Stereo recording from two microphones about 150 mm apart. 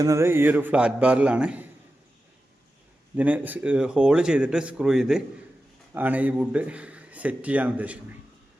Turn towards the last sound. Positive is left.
turn(degrees=-10)  # may be behind; listen again after turning